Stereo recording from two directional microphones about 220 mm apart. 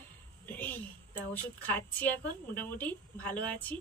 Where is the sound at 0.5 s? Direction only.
10° left (ahead or behind).